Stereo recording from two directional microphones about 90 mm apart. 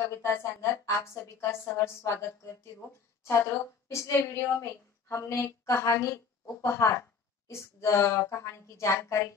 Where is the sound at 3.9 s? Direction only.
30° left (ahead or behind).